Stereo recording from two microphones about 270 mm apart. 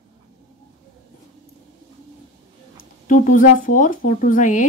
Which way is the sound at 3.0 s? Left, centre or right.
Left.